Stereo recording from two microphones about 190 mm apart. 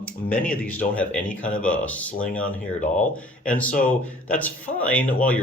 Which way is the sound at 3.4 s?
5° left (ahead or behind).